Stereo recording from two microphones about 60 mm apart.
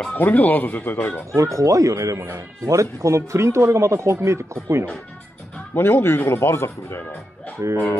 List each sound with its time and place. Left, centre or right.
0.1 s speech: left
1.3 s speech: right
5.8 s speech: left
7.6 s speech: right